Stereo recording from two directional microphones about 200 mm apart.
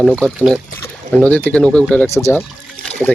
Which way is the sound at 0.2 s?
Centre (ahead or behind).